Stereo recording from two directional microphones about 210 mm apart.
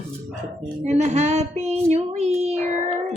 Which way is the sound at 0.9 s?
30° right (ahead or behind).